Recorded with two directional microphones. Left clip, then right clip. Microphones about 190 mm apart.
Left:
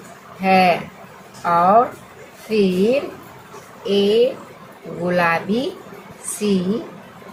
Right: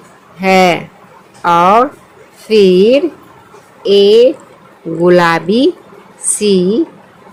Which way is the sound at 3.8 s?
65° right (ahead or behind).